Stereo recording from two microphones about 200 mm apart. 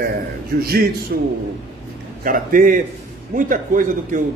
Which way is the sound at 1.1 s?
50° right (ahead or behind).